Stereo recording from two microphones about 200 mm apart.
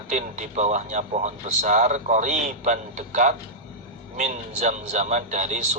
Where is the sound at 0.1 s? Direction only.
35° right (ahead or behind).